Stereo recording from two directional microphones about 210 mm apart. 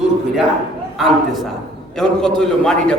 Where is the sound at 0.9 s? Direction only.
Centre (ahead or behind).